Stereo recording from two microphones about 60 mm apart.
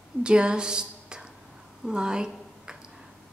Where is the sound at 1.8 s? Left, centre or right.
Centre.